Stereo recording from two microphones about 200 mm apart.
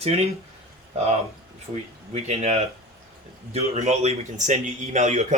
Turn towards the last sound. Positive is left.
turn(degrees=-35)  # may be behind; listen again after turning